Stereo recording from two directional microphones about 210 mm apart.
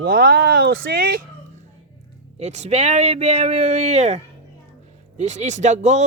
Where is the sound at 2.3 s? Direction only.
30° right (ahead or behind).